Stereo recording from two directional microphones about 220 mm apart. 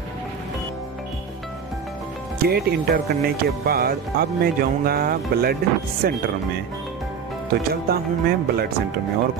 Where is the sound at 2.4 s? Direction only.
45° right (ahead or behind).